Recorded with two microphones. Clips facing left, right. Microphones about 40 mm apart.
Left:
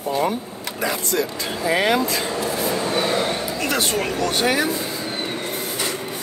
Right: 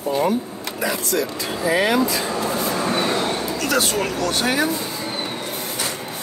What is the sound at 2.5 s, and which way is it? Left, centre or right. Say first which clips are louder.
Speech: even; centre.